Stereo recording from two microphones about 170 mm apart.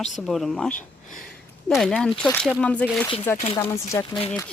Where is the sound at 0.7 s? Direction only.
50° left (ahead or behind).